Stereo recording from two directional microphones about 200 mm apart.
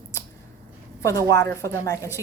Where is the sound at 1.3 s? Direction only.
15° left (ahead or behind).